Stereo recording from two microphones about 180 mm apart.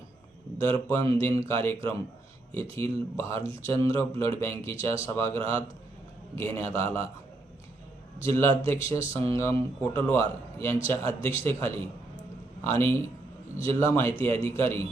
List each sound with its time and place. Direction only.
0.6 s speech: 15° left (ahead or behind)
8.2 s speech: 15° left (ahead or behind)